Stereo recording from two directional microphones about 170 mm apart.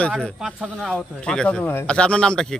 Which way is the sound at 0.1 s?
Centre (ahead or behind).